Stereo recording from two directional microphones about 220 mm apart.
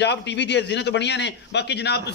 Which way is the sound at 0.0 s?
50° left (ahead or behind).